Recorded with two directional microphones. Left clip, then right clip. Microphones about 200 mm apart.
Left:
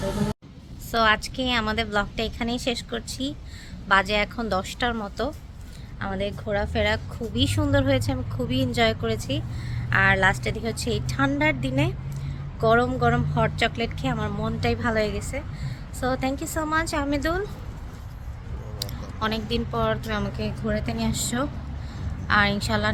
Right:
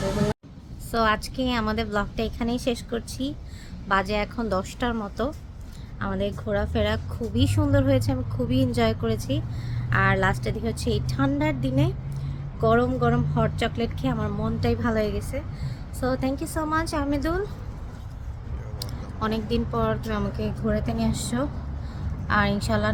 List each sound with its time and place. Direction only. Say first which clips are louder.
0.9 s a woman's voice: left 2 dB; 15° right (ahead or behind)
18.8 s a woman's voice: left 2 dB; 20° right (ahead or behind)